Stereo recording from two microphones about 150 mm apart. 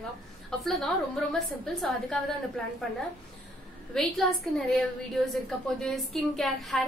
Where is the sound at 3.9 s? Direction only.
Centre (ahead or behind).